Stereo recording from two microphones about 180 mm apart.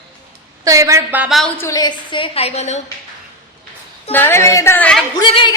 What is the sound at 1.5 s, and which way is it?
A woman's voice, 15° left (ahead or behind).